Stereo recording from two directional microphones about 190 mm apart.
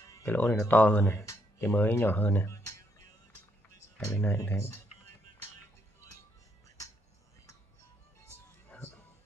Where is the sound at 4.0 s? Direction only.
15° left (ahead or behind).